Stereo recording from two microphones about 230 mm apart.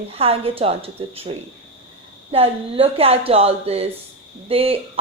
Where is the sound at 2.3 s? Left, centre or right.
Right.